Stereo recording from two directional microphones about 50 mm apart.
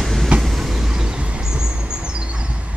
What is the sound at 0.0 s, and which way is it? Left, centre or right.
Vehicle, centre.